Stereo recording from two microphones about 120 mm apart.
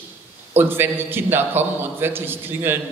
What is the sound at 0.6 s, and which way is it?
A man's voice, 20° right (ahead or behind).